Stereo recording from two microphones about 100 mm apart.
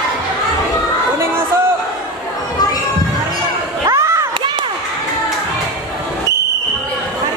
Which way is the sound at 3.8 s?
35° right (ahead or behind).